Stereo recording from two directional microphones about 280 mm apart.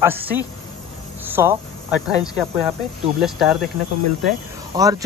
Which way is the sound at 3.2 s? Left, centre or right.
Centre.